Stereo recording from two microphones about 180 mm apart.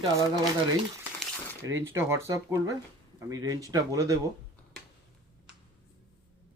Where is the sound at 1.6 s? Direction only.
15° right (ahead or behind).